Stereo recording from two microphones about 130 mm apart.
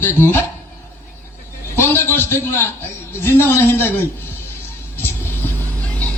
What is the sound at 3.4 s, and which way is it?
Speech, 15° left (ahead or behind).